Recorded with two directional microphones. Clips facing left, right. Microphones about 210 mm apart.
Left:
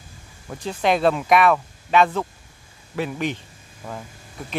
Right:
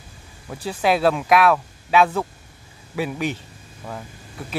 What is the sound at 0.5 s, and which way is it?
Speech, 10° right (ahead or behind).